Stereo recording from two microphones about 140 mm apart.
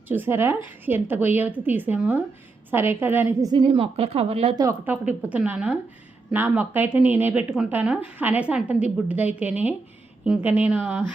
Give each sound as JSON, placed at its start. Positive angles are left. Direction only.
{"t": 0.1, "sound": "a woman's voice", "side_deg": -15}
{"t": 3.4, "sound": "a woman's voice", "side_deg": -30}
{"t": 4.5, "sound": "speech", "side_deg": -25}
{"t": 4.9, "sound": "a woman's voice", "side_deg": -10}